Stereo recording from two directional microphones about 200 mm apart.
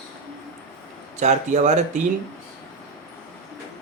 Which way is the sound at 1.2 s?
35° right (ahead or behind).